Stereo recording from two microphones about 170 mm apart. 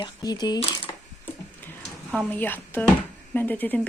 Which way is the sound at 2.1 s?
5° left (ahead or behind).